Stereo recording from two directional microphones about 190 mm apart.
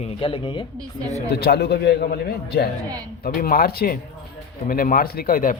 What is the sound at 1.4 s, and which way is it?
A man's voice, 55° left (ahead or behind).